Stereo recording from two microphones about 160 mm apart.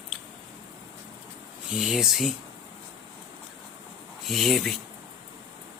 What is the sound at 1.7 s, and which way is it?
Speech, 5° right (ahead or behind).